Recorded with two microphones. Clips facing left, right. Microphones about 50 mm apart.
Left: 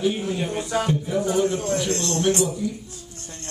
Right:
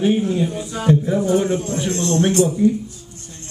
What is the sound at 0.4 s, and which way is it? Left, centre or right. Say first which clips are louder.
Speech: right 1 dB; left.